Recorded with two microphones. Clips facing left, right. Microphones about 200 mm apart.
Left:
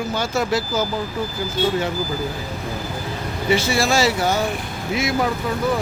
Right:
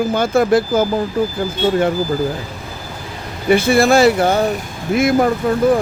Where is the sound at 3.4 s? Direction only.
55° right (ahead or behind).